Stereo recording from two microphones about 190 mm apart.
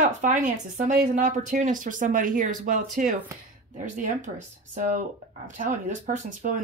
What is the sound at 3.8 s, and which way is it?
Speech, 40° right (ahead or behind).